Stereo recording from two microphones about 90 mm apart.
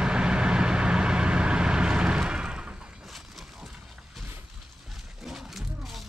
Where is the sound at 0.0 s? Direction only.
10° right (ahead or behind).